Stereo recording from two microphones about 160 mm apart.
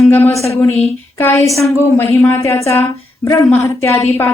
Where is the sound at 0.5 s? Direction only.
15° left (ahead or behind).